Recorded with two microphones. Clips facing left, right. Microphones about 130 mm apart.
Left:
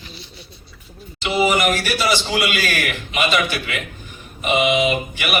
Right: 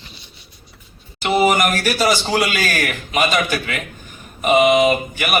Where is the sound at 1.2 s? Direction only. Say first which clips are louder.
Right 2 dB; 50° right (ahead or behind).